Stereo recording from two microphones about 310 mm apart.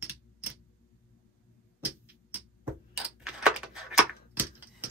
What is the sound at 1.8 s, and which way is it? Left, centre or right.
Music, centre.